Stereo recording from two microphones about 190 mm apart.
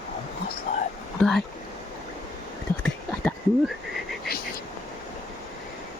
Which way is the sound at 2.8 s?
5° left (ahead or behind).